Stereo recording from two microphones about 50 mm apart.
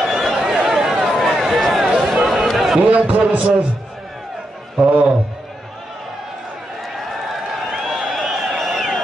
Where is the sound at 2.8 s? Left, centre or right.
Right.